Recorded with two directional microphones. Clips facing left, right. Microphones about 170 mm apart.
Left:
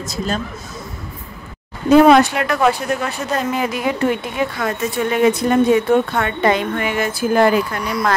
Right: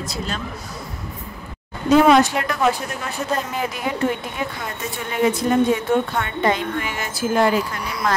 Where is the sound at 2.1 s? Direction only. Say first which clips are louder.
Left 3 dB; 65° left (ahead or behind).